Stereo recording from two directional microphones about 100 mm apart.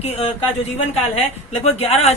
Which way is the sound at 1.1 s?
90° left.